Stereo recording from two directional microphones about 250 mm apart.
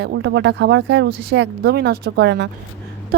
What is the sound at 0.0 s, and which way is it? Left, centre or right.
A woman's voice, right.